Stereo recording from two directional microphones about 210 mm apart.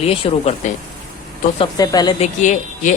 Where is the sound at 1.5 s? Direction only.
20° left (ahead or behind).